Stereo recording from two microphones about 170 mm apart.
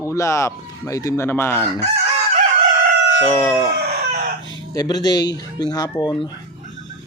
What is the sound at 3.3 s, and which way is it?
Mantra, 10° left (ahead or behind).